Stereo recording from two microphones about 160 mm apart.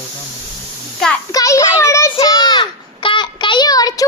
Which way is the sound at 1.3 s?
20° left (ahead or behind).